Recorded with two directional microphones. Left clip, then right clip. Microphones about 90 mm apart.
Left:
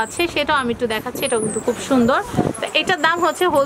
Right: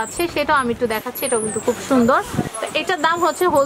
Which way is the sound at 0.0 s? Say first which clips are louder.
Left 1 dB; 70° left (ahead or behind).